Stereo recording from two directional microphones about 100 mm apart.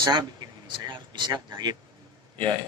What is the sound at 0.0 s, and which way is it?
Speech, 45° right (ahead or behind).